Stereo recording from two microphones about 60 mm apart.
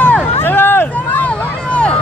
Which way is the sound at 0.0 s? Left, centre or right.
Left.